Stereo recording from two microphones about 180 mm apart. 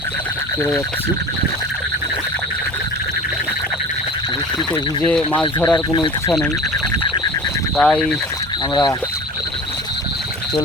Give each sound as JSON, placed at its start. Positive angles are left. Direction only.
{"t": 5.3, "sound": "speech", "side_deg": 25}
{"t": 7.8, "sound": "speech", "side_deg": 5}
{"t": 8.7, "sound": "speech", "side_deg": 25}